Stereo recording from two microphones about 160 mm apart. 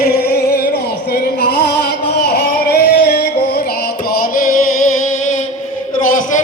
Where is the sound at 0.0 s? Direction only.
85° left.